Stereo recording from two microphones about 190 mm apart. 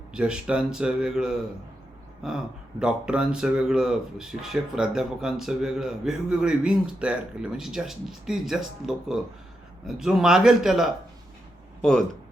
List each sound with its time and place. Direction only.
0.1 s speech: 5° right (ahead or behind)